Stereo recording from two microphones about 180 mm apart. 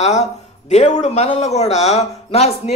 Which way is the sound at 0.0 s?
40° left (ahead or behind).